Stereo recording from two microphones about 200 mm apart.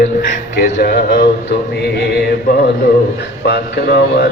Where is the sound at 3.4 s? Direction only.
55° left (ahead or behind).